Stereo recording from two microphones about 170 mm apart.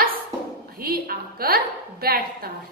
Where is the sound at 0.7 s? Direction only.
65° right (ahead or behind).